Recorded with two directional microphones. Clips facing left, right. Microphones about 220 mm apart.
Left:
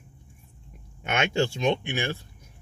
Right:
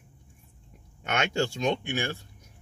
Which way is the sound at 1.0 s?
10° left (ahead or behind).